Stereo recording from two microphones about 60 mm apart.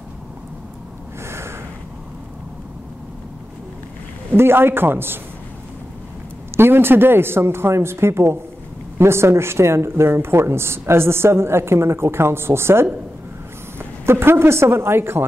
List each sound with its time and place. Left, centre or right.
1.2 s snort: right
4.3 s a man's voice: right
6.5 s a woman's voice: right